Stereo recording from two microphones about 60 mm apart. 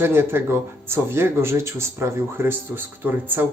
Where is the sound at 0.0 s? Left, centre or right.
Right.